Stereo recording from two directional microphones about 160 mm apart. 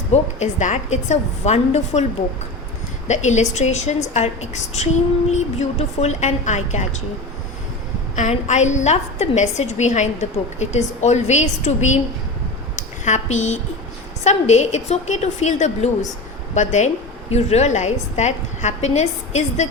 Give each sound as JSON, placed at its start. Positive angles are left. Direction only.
{"t": 0.1, "sound": "a woman's voice", "side_deg": 45}
{"t": 3.1, "sound": "a woman's voice", "side_deg": 45}
{"t": 8.1, "sound": "a woman's voice", "side_deg": 50}